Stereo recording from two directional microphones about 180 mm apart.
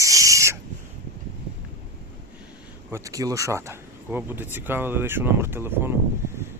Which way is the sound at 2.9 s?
15° right (ahead or behind).